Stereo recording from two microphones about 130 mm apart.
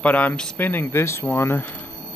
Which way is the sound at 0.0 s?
10° left (ahead or behind).